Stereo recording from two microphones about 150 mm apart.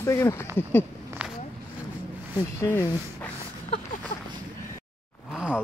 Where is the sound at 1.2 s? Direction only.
10° right (ahead or behind).